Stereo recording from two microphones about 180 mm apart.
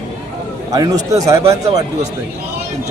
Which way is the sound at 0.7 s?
20° right (ahead or behind).